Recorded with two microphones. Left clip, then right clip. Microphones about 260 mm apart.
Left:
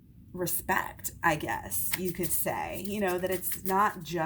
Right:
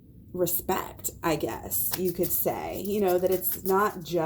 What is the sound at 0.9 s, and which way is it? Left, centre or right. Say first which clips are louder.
A woman's voice: left 1 dB; left.